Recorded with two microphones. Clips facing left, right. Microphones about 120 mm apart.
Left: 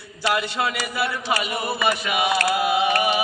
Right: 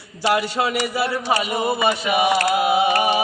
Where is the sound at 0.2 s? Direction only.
25° right (ahead or behind).